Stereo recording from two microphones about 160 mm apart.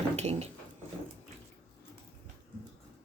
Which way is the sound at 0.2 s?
40° right (ahead or behind).